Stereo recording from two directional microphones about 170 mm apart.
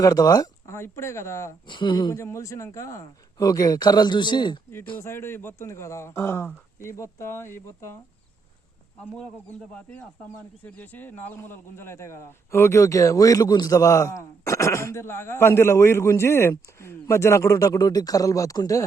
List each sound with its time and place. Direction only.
0.0 s speech: 20° left (ahead or behind)
1.6 s speech: 30° left (ahead or behind)
4.9 s speech: 15° left (ahead or behind)
10.7 s speech: 10° left (ahead or behind)